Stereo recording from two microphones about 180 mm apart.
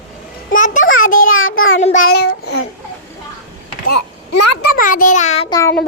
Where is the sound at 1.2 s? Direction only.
90° left.